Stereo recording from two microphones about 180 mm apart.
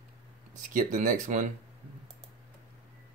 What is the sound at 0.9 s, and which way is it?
Speech, 45° right (ahead or behind).